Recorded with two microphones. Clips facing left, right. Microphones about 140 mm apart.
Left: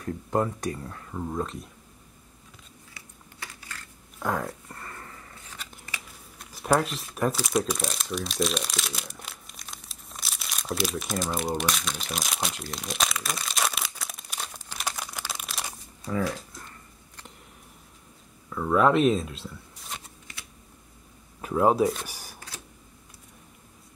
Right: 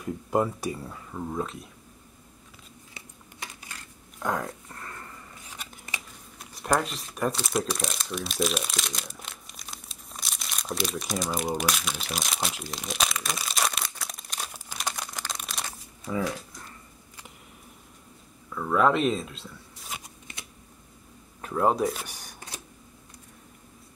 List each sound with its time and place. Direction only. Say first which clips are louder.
0.0 s speech: right 1 dB; 10° right (ahead or behind)
2.9 s a sound: right 2 dB; 20° right (ahead or behind)
4.2 s a sound: left 1 dB; centre (ahead or behind)
5.3 s a sound: even; 15° right (ahead or behind)
6.3 s crumpling: left 2 dB; centre (ahead or behind)
16.1 s dog: left 1 dB; 5° right (ahead or behind)
18.5 s speech: left 2 dB; 5° left (ahead or behind)
20.0 s shuffling cards: right 2 dB; 20° right (ahead or behind)
21.4 s speech: left 3 dB; 5° left (ahead or behind)